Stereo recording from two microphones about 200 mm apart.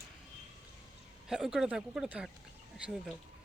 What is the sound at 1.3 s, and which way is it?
Speech, centre (ahead or behind).